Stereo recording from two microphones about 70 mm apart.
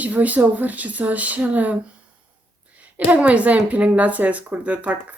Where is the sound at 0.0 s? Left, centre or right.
Right.